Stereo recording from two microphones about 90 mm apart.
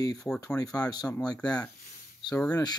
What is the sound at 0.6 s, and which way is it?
Speech, 45° left (ahead or behind).